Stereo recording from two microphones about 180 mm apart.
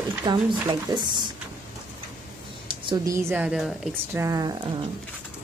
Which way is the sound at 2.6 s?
25° right (ahead or behind).